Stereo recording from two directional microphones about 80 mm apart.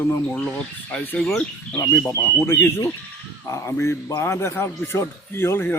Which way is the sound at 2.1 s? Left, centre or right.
Left.